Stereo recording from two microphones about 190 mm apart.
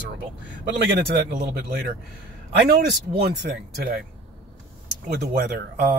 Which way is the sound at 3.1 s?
55° right (ahead or behind).